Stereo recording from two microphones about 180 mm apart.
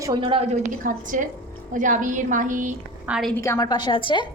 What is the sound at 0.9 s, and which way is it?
A woman's voice, 45° right (ahead or behind).